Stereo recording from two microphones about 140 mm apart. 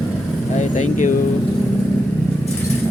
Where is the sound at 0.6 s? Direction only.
65° left (ahead or behind).